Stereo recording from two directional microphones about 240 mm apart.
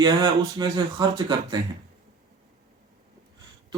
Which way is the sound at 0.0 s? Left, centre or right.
Centre.